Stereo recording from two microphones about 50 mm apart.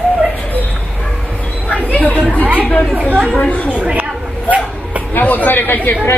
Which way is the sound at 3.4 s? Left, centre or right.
Left.